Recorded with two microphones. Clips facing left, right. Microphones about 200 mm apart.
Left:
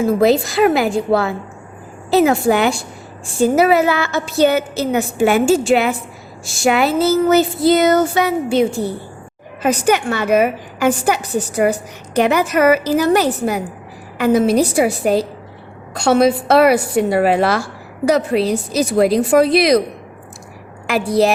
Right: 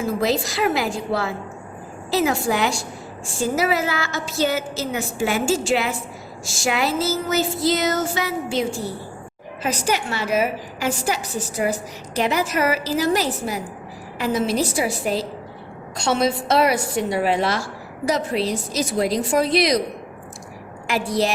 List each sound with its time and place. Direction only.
0.2 s a woman's voice: 60° left (ahead or behind)
20.8 s a woman's voice: 60° left (ahead or behind)